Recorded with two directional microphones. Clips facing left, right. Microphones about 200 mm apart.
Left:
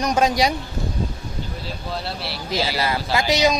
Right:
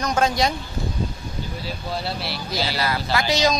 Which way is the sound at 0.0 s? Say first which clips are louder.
Left 2 dB; 15° left (ahead or behind).